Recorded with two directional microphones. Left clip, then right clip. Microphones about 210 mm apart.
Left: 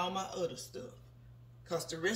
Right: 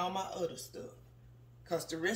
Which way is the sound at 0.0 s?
25° right (ahead or behind).